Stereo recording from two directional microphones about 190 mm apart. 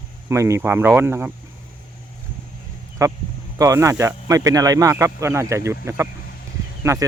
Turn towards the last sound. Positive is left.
turn(degrees=-15)  # may be behind; listen again after turning